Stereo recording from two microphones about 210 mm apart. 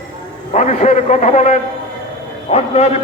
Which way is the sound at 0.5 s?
35° left (ahead or behind).